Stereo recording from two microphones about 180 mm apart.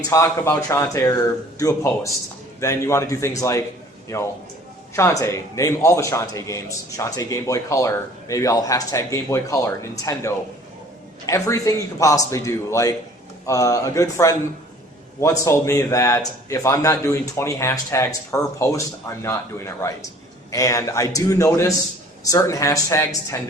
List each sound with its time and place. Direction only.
0.1 s a man's voice: 15° left (ahead or behind)
4.9 s a man's voice: 15° left (ahead or behind)